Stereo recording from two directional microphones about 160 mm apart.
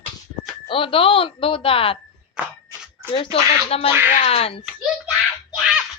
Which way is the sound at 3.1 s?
35° left (ahead or behind).